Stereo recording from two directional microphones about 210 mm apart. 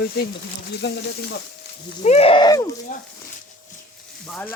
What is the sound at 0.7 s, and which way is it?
Speech, 55° left (ahead or behind).